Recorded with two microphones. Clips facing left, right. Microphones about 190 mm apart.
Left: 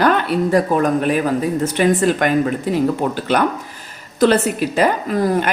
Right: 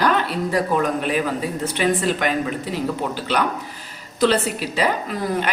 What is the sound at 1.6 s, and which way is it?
Speech, 50° left (ahead or behind).